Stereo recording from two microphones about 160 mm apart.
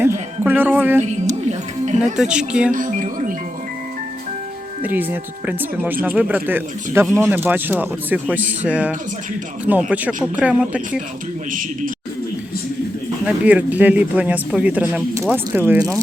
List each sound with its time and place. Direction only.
0.0 s speech: 15° right (ahead or behind)
1.3 s music: 45° right (ahead or behind)
2.1 s speech: 5° right (ahead or behind)
2.7 s speech: 55° right (ahead or behind)
4.8 s speech: 10° right (ahead or behind)
13.2 s speech: 10° right (ahead or behind)